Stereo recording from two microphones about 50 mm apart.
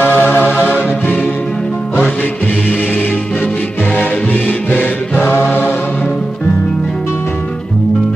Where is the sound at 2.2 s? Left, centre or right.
Left.